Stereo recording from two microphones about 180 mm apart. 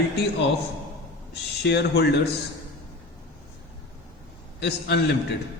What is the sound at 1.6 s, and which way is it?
Speech, 70° left (ahead or behind).